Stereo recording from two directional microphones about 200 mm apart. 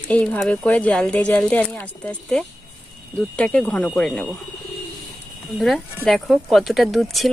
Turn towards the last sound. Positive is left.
turn(degrees=0)  # may be behind; listen again after turning